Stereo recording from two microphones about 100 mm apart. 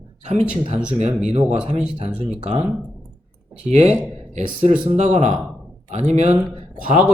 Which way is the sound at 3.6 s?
90° right.